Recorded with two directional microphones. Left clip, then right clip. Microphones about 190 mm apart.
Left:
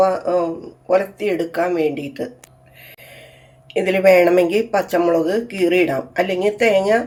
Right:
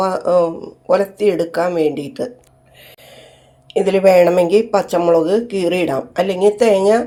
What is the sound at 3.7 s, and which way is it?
Speech, 20° right (ahead or behind).